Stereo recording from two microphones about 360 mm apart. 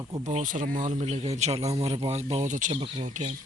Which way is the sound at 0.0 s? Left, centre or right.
Centre.